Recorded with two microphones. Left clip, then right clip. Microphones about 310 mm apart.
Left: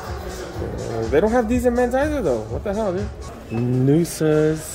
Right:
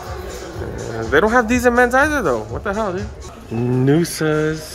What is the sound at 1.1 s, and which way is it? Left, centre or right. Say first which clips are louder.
Speech: right 4 dB; centre.